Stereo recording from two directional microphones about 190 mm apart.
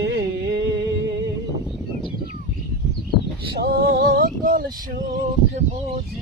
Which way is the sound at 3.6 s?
60° right (ahead or behind).